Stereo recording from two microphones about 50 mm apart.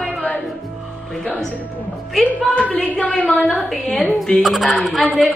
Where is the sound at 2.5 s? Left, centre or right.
Left.